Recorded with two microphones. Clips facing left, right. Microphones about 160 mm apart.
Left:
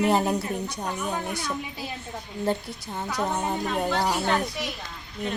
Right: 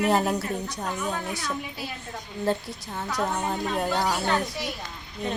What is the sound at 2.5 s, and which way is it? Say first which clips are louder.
Speech: right 1 dB; 15° left (ahead or behind).